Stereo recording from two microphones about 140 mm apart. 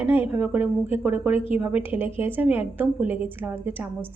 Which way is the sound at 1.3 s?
45° left (ahead or behind).